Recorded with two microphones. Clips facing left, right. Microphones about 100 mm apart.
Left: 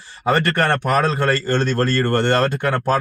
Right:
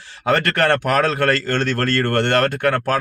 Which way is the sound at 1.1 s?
65° right (ahead or behind).